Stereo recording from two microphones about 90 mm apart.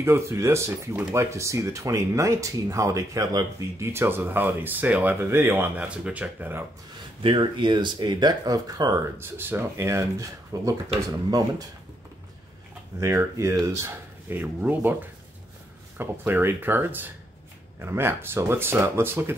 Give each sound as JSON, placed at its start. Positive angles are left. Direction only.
{"t": 0.0, "sound": "speech", "side_deg": -30}
{"t": 3.9, "sound": "speech", "side_deg": -25}
{"t": 5.8, "sound": "speech", "side_deg": -15}
{"t": 7.2, "sound": "speech", "side_deg": -65}
{"t": 9.2, "sound": "speech", "side_deg": -25}
{"t": 11.2, "sound": "speech", "side_deg": -45}
{"t": 13.0, "sound": "speech", "side_deg": -35}
{"t": 16.0, "sound": "speech", "side_deg": -25}